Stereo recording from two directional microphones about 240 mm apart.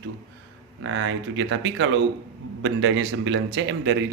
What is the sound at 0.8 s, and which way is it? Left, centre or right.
A man's voice, right.